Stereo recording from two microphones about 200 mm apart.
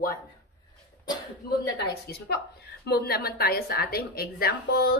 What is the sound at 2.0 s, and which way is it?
Speech, 55° left (ahead or behind).